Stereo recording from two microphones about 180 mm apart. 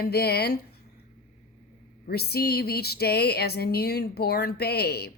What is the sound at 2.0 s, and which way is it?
Speech, 60° left (ahead or behind).